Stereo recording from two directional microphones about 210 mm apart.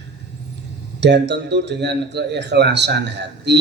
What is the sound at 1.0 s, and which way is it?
A man's voice, 55° right (ahead or behind).